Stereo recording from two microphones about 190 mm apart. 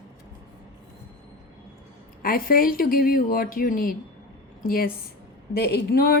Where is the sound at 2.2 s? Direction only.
50° left (ahead or behind).